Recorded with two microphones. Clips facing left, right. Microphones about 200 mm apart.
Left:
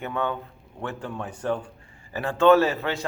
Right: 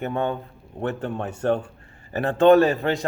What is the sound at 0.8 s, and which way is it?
A man's voice, 60° right (ahead or behind).